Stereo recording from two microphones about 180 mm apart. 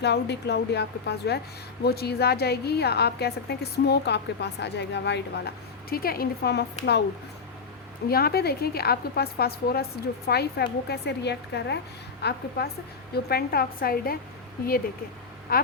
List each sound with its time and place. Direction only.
0.0 s a woman's voice: 70° left (ahead or behind)
8.1 s a woman's voice: 60° left (ahead or behind)